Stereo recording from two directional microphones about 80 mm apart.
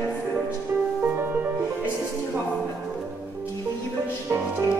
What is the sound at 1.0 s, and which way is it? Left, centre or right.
Music, right.